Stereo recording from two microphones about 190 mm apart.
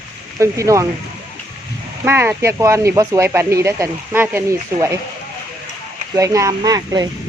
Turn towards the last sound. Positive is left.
turn(degrees=-20)  # may be behind; listen again after turning